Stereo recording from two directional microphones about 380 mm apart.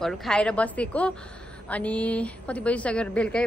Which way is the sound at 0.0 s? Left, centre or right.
Centre.